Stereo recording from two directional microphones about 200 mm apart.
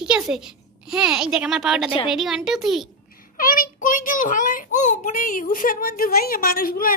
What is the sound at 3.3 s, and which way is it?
A child's voice, 45° left (ahead or behind).